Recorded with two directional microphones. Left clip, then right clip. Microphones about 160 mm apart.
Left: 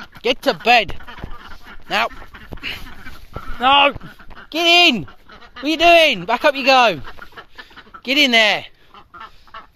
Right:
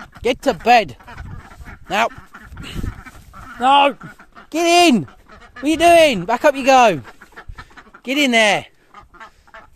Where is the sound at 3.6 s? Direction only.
40° right (ahead or behind).